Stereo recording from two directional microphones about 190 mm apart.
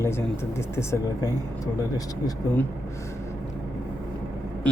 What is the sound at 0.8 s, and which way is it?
Speech, 15° left (ahead or behind).